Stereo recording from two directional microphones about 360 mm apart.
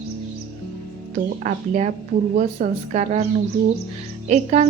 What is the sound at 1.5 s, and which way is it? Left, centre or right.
A woman's voice, centre.